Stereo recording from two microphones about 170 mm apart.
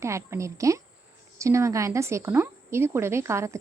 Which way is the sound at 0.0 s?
15° right (ahead or behind).